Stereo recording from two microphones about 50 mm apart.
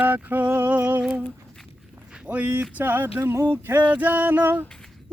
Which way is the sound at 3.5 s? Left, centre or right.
Right.